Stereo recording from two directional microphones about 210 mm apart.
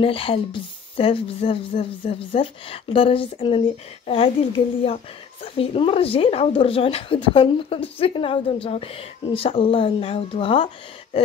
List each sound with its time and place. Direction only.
0.0 s speech: 25° left (ahead or behind)